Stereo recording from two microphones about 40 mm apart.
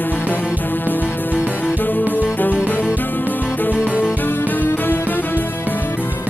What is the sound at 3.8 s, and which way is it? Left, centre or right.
Music, right.